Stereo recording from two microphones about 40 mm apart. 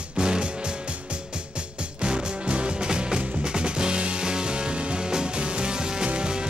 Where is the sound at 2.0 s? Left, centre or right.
Right.